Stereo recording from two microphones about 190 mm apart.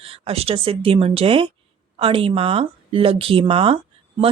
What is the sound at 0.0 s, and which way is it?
A woman's voice, 30° right (ahead or behind).